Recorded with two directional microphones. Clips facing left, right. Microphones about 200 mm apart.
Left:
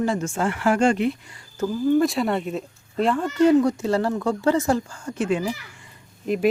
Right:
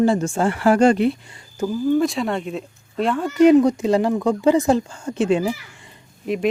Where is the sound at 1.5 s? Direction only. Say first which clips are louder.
Right 2 dB; 10° right (ahead or behind).